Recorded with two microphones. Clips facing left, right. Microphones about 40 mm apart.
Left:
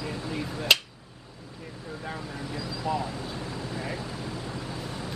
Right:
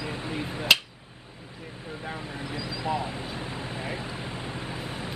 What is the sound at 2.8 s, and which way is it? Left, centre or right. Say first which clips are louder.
Speech: even; right.